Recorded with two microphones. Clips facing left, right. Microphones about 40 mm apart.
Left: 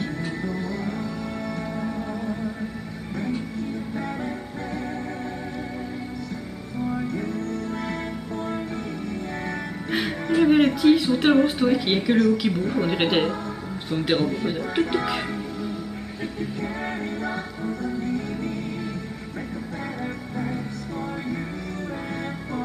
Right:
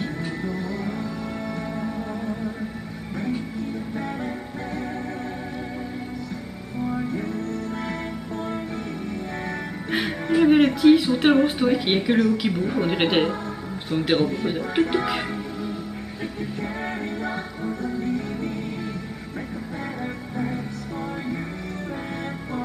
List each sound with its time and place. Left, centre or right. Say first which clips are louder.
0.0 s music: even; centre
3.2 s music: right 1 dB; centre
6.8 s music: even; centre
7.2 s music: even; centre
9.8 s speech: right 1 dB; centre
16.3 s music: left 1 dB; centre
20.3 s music: right 2 dB; centre